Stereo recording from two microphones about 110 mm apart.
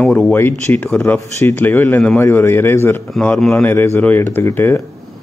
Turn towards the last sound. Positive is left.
turn(degrees=25)  # may be behind; listen again after turning